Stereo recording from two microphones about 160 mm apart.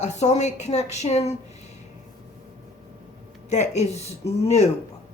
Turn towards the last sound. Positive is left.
turn(degrees=40)  # may be behind; listen again after turning